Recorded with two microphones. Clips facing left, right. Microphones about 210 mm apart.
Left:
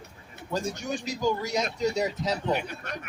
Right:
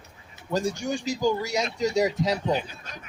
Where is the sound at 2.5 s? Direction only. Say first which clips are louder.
Right 1 dB; 65° left (ahead or behind).